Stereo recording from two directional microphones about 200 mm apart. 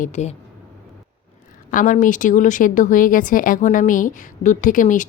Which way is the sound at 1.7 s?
40° left (ahead or behind).